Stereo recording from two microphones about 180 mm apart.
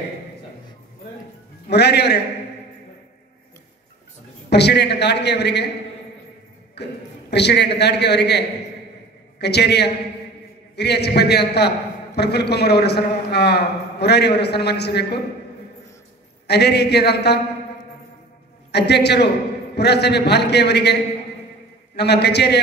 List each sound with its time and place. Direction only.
1.7 s a man's voice: 65° left (ahead or behind)
4.5 s a man's voice: 70° left (ahead or behind)
6.7 s a man's voice: 70° left (ahead or behind)
16.4 s a man's voice: 65° left (ahead or behind)
18.7 s a man's voice: 70° left (ahead or behind)